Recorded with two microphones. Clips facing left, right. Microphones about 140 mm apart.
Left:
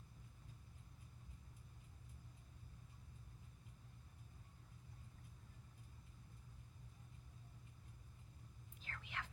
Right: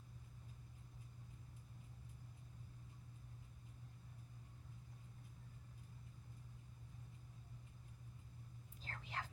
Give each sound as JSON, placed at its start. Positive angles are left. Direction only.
{"t": 8.8, "sound": "whispering", "side_deg": -35}